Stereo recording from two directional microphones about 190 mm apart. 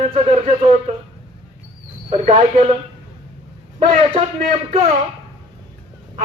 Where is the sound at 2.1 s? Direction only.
35° right (ahead or behind).